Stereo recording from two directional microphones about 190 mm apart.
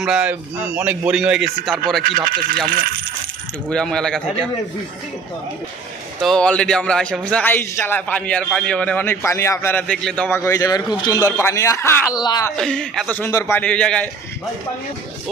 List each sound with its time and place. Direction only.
0.0 s a man's voice: 5° right (ahead or behind)
2.0 s speech: 50° right (ahead or behind)
3.7 s a man's voice: 5° left (ahead or behind)
6.2 s a man's voice: 5° left (ahead or behind); by 12.5 s 20° left (ahead or behind)
12.5 s a man's voice: 5° left (ahead or behind)